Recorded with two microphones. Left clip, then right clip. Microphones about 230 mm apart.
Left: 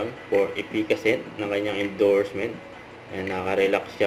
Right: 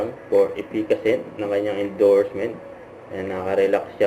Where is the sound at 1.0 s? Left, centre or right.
Left.